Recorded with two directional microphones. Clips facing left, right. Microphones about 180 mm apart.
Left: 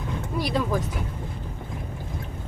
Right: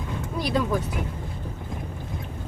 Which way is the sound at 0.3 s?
Centre (ahead or behind).